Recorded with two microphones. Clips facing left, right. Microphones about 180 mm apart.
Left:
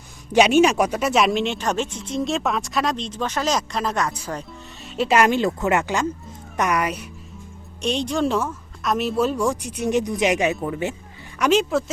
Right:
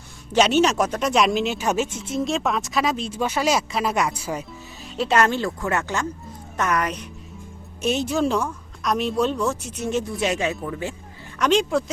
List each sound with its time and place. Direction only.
0.3 s speech: 10° left (ahead or behind); by 4.4 s 10° right (ahead or behind)
4.9 s speech: 10° left (ahead or behind)
7.8 s speech: 5° right (ahead or behind); by 10.9 s 20° left (ahead or behind)
11.3 s speech: 5° left (ahead or behind)